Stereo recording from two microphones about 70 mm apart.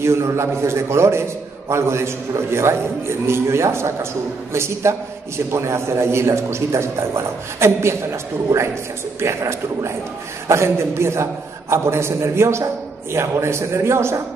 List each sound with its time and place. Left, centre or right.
0.0 s a man's voice: right